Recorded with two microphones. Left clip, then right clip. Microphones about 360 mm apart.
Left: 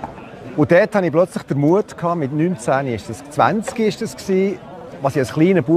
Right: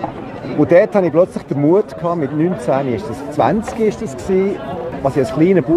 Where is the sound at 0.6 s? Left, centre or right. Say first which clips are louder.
Right 3 dB; left.